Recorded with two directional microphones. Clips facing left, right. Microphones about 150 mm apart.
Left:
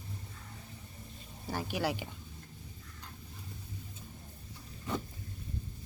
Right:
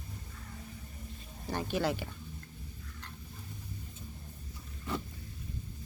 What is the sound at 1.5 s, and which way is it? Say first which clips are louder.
Speech: right 2 dB; 10° left (ahead or behind).